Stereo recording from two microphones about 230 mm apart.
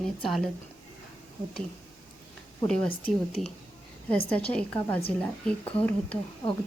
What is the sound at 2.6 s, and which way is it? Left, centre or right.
Speech, centre.